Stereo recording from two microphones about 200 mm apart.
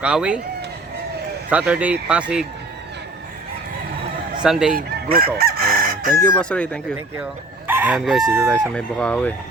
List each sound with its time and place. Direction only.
0.0 s a man's voice: 5° right (ahead or behind)
1.5 s a man's voice: 5° right (ahead or behind)
4.7 s chicken: 50° right (ahead or behind)
6.2 s a man's voice: 5° left (ahead or behind)
7.7 s crowing: 10° right (ahead or behind)
8.7 s a man's voice: 5° left (ahead or behind)